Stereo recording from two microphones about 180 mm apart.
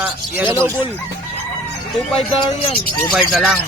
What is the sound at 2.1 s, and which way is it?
Speech, 30° left (ahead or behind).